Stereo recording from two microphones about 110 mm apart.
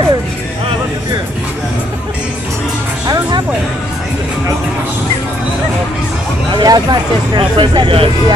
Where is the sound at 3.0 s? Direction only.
35° right (ahead or behind).